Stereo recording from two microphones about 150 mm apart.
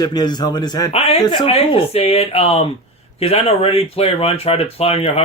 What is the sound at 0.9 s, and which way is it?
Speech, 45° left (ahead or behind).